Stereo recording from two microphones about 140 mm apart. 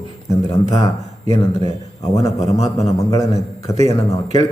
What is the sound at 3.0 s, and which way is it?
A man's voice, 25° left (ahead or behind).